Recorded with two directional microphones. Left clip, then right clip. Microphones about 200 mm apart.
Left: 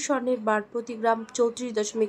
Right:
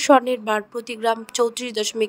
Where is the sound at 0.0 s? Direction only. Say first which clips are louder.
Right 9 dB; 40° right (ahead or behind).